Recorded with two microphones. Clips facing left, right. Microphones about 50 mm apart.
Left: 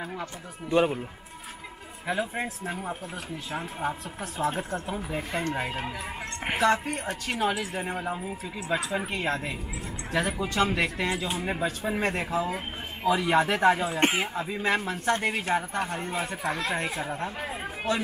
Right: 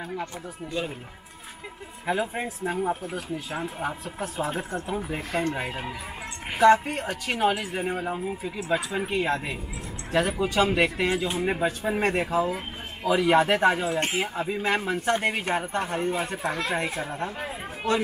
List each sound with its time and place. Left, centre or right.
0.7 s speech: left
2.0 s speech: centre
6.6 s speech: centre
12.4 s a sound: centre
13.1 s speech: centre
13.9 s speech: left
14.3 s speech: centre